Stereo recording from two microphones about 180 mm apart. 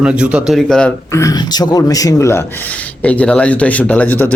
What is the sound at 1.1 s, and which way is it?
Speech, 20° left (ahead or behind).